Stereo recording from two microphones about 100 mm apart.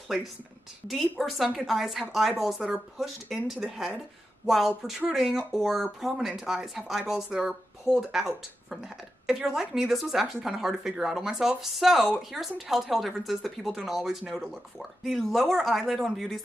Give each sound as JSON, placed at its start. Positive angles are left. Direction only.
{"t": 1.2, "sound": "a woman's voice", "side_deg": 0}